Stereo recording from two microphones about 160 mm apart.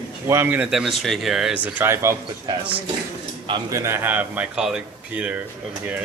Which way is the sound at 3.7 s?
15° right (ahead or behind).